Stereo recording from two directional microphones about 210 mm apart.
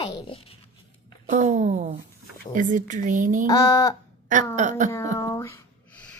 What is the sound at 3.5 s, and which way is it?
Speech, 15° left (ahead or behind).